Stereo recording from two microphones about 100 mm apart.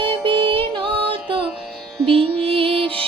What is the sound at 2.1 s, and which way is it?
Music, 70° right (ahead or behind).